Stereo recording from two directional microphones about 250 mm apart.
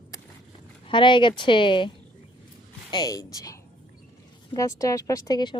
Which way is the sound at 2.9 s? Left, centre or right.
Centre.